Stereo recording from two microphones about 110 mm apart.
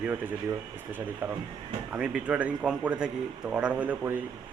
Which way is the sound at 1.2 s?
15° right (ahead or behind).